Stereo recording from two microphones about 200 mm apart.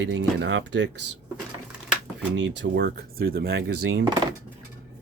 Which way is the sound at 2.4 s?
60° right (ahead or behind).